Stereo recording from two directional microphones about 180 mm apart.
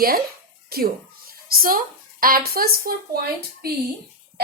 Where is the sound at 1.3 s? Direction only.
55° right (ahead or behind).